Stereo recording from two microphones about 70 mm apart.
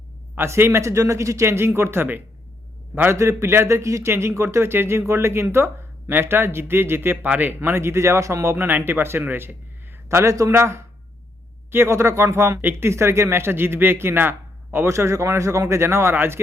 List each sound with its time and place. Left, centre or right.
0.3 s a man's voice: right
10.1 s a man's voice: right